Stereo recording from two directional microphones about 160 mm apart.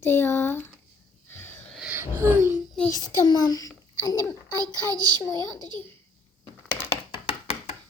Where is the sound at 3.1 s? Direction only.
25° left (ahead or behind).